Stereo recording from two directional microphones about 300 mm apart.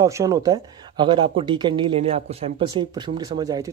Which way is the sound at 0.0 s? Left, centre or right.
Centre.